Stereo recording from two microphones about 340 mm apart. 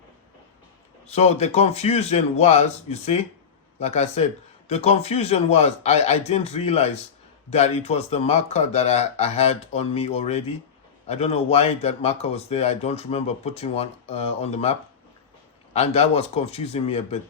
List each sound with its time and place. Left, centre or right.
1.0 s a man's voice: centre